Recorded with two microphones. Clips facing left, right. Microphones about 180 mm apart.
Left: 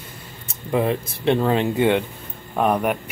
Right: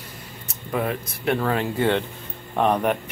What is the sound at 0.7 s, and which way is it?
Speech, 25° left (ahead or behind).